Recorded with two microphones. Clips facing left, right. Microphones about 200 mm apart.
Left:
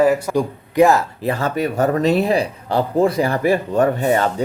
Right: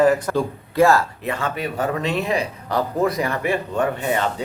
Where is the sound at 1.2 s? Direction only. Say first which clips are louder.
Left 5 dB; 35° left (ahead or behind).